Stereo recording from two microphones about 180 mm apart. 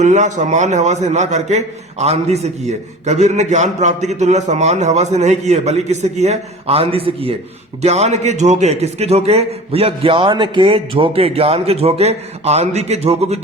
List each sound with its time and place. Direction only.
0.0 s a man's voice: 40° right (ahead or behind)